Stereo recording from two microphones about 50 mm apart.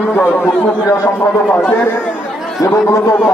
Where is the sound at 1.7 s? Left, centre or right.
Left.